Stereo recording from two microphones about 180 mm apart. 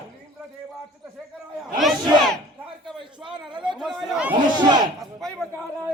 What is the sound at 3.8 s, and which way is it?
Speech, centre (ahead or behind).